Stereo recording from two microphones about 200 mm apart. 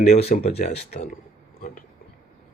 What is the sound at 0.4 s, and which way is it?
Speech, 30° left (ahead or behind).